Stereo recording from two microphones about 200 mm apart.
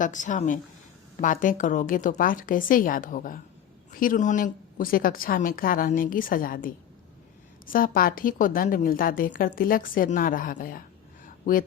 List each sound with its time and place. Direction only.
0.0 s a woman's voice: 40° left (ahead or behind)